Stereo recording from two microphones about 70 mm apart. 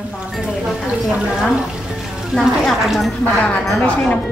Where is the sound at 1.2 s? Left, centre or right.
Centre.